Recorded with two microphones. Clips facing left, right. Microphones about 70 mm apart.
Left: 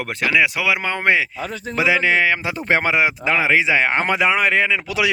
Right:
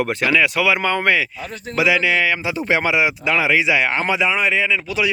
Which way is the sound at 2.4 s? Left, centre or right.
Left.